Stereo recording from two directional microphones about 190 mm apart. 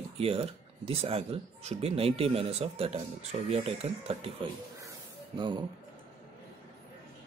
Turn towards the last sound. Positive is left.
turn(degrees=-25)  # may be behind; listen again after turning